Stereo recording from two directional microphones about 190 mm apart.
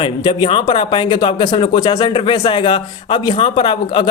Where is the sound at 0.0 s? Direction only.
25° left (ahead or behind).